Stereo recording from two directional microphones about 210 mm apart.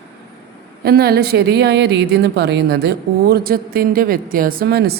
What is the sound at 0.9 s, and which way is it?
Speech, 50° right (ahead or behind).